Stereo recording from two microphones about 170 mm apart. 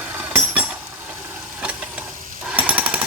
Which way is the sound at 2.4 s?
10° right (ahead or behind).